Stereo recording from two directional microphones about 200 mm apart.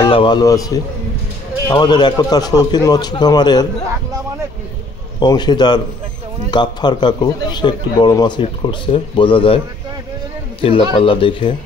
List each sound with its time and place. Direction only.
0.0 s a man's voice: 25° left (ahead or behind)
5.2 s a man's voice: 20° left (ahead or behind)
10.6 s a man's voice: 25° left (ahead or behind)